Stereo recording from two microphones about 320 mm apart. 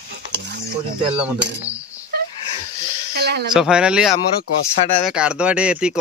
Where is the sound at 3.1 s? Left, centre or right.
Right.